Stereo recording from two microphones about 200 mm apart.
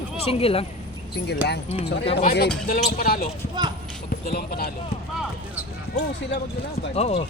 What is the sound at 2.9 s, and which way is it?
Speech, 45° left (ahead or behind).